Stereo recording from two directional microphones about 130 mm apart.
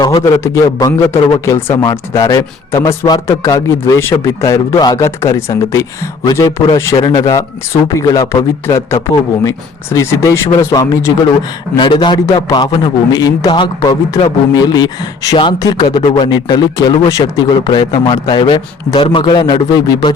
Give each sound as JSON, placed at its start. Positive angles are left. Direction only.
{"t": 0.2, "sound": "a man's voice", "side_deg": 20}